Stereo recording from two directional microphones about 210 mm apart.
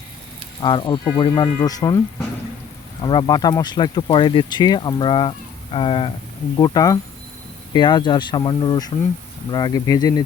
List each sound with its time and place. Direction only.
0.6 s speech: 20° left (ahead or behind)
3.0 s speech: 20° left (ahead or behind)